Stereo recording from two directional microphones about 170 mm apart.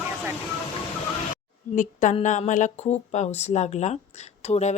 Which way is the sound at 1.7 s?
50° left (ahead or behind).